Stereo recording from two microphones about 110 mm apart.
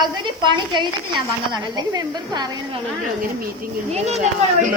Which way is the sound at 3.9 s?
75° right (ahead or behind).